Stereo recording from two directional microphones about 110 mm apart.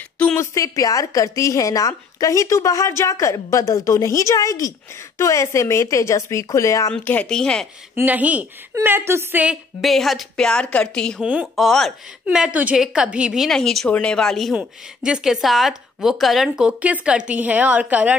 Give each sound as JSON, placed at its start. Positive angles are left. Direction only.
{"t": 0.4, "sound": "a woman's voice", "side_deg": 30}
{"t": 6.9, "sound": "speech", "side_deg": 10}
{"t": 7.9, "sound": "speech", "side_deg": -15}
{"t": 9.8, "sound": "a woman's voice", "side_deg": 0}
{"t": 11.2, "sound": "a woman's voice", "side_deg": -5}
{"t": 14.5, "sound": "speech", "side_deg": -10}